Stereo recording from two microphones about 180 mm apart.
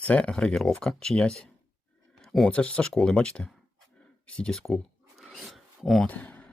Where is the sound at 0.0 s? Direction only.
5° left (ahead or behind).